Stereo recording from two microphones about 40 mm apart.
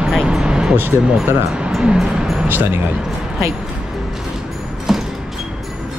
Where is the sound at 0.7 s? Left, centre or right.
Right.